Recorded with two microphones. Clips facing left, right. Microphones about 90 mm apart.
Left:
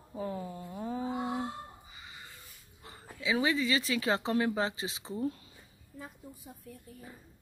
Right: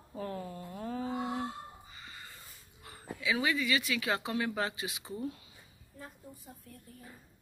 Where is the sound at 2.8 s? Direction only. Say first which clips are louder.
Even; 25° left (ahead or behind).